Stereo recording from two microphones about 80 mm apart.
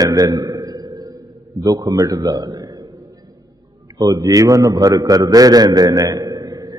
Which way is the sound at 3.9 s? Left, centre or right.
Right.